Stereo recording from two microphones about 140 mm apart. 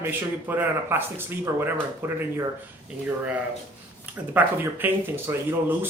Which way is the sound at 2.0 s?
15° right (ahead or behind).